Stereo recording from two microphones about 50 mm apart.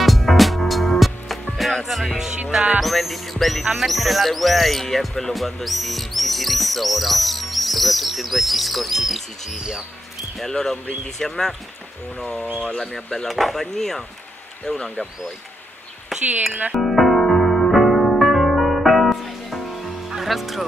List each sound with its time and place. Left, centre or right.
0.0 s music: centre
2.8 s speech: centre
9.6 s speech: centre
10.3 s speech: centre
16.1 s speech: centre
16.7 s piano: centre